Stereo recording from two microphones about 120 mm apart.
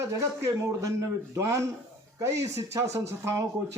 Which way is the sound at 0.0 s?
25° right (ahead or behind).